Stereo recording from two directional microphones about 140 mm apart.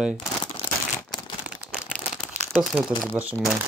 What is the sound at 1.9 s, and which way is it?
Crumpling, 5° left (ahead or behind).